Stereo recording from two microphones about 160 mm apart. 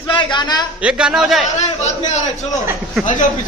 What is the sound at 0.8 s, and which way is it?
Speech, 5° right (ahead or behind).